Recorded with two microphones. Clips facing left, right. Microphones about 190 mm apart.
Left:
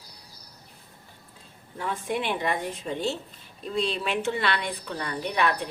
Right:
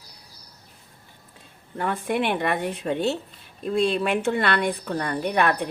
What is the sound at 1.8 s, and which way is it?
A woman's voice, 60° right (ahead or behind).